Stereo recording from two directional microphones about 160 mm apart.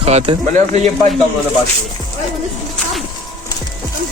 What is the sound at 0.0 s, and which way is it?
Speech, 40° right (ahead or behind).